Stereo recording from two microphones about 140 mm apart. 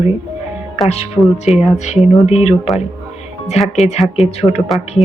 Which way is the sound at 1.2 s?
20° left (ahead or behind).